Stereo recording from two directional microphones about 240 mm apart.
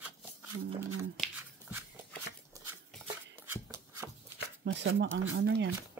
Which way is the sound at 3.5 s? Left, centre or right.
Centre.